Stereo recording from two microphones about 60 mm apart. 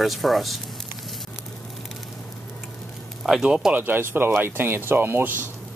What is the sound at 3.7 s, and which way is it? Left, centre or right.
Speech, right.